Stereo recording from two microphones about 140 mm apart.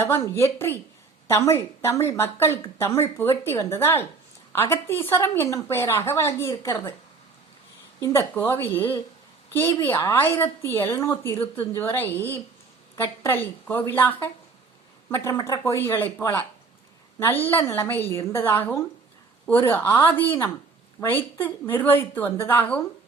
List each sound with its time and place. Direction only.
0.0 s a woman's voice: 20° left (ahead or behind)
8.0 s a woman's voice: 15° left (ahead or behind)